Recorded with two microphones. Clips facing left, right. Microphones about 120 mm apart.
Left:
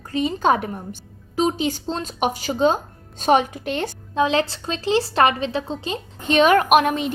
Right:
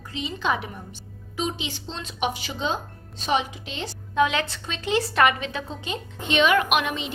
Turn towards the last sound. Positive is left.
turn(degrees=45)  # may be behind; listen again after turning